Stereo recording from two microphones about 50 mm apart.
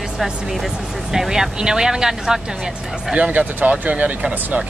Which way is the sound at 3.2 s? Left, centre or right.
Right.